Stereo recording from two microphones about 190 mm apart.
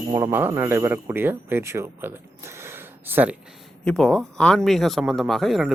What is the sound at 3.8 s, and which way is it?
Speech, 5° left (ahead or behind).